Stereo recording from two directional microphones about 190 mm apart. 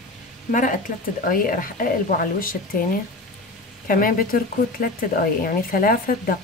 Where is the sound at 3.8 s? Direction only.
50° left (ahead or behind).